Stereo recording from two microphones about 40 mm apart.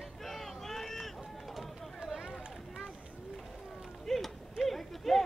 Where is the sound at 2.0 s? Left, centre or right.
Centre.